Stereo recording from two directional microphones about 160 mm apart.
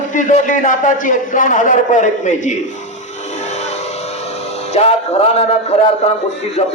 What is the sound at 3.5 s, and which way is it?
Vehicle, 45° left (ahead or behind).